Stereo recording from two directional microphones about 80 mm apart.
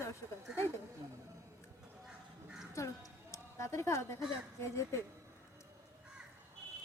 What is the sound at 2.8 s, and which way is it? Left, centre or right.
A woman's voice, left.